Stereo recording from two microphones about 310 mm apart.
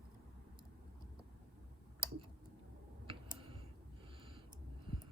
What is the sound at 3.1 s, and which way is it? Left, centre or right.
Tick, centre.